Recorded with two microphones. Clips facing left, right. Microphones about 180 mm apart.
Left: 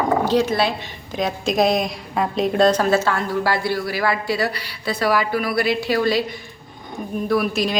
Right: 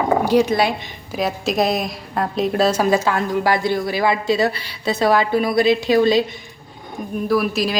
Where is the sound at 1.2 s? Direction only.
Centre (ahead or behind); by 6.2 s 20° right (ahead or behind).